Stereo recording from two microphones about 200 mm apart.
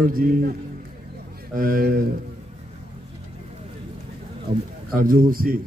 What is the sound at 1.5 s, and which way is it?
Speech, 45° right (ahead or behind).